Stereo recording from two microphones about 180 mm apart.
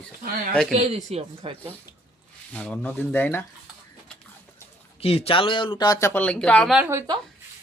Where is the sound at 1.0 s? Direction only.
35° right (ahead or behind).